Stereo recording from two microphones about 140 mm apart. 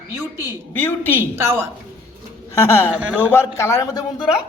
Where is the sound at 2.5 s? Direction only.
20° left (ahead or behind).